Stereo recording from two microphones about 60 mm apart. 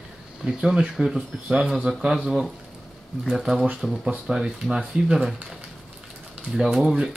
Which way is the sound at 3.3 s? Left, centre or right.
Centre.